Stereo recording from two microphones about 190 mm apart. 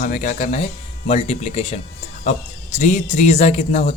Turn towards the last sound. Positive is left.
turn(degrees=35)  # may be behind; listen again after turning